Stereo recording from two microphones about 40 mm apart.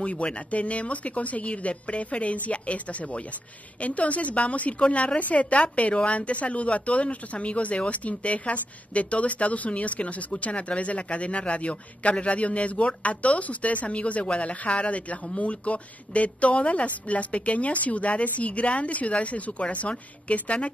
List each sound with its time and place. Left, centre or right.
0.0 s a woman's voice: left